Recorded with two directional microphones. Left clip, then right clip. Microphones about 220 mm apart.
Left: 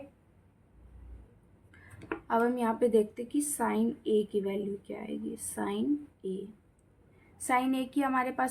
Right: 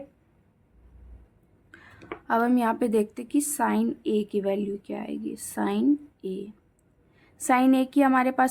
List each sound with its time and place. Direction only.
2.2 s a woman's voice: 40° right (ahead or behind)
7.4 s a woman's voice: 40° right (ahead or behind)